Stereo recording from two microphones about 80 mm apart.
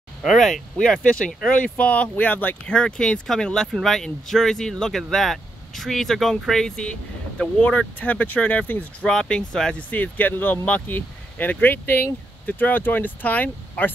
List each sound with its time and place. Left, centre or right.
0.3 s speech: centre; by 8.8 s left
9.0 s speech: centre
9.8 s speech: centre